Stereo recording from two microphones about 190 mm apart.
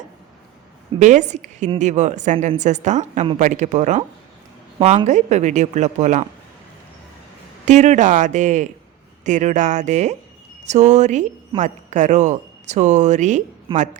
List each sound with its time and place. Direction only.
0.9 s speech: 40° right (ahead or behind)
5.0 s speech: 40° right (ahead or behind)
7.6 s speech: 40° right (ahead or behind)